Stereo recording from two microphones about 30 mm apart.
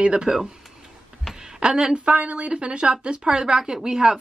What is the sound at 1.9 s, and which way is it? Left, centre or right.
A woman's voice, right.